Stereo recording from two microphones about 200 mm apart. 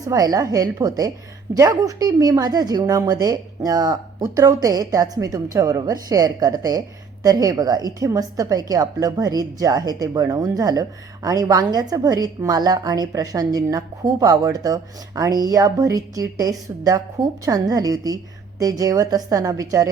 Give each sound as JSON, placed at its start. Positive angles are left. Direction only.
{"t": 0.0, "sound": "a woman's voice", "side_deg": -15}